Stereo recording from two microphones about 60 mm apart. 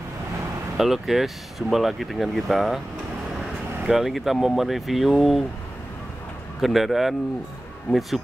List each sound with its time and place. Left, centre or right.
0.7 s speech: centre
6.6 s speech: centre
7.9 s speech: left